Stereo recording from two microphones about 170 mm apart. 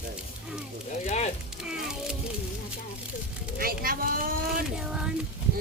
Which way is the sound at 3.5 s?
60° right (ahead or behind).